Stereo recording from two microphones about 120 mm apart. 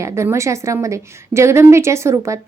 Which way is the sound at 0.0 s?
20° right (ahead or behind).